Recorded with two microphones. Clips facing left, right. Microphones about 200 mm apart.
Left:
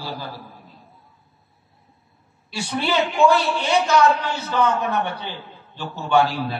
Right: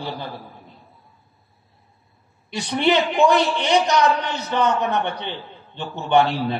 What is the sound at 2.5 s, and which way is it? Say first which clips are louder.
A man's voice: right 4 dB; 20° right (ahead or behind).